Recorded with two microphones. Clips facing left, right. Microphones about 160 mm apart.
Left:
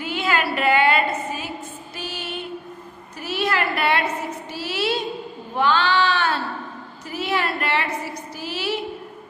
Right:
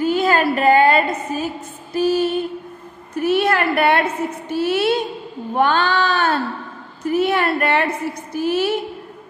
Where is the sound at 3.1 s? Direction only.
55° right (ahead or behind).